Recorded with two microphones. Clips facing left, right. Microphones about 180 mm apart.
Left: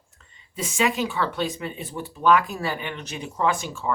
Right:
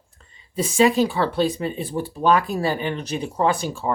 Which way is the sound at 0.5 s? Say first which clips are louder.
Right 7 dB; 35° right (ahead or behind).